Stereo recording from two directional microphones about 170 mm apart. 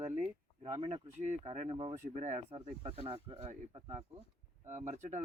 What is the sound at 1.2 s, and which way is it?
Speech, 40° right (ahead or behind).